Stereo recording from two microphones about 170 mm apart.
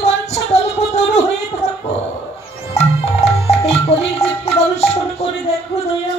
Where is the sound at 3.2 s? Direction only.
40° left (ahead or behind).